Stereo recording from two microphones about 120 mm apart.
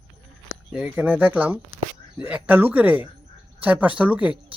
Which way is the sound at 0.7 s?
10° right (ahead or behind).